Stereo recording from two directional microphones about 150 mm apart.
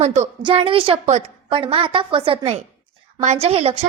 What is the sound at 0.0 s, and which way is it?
Speech, 50° right (ahead or behind).